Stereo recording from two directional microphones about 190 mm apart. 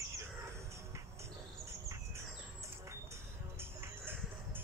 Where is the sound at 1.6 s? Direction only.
15° right (ahead or behind).